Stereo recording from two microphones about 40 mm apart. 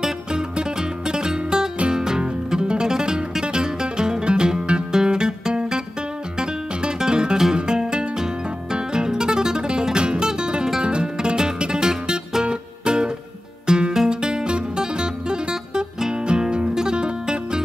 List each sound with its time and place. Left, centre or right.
0.0 s music: right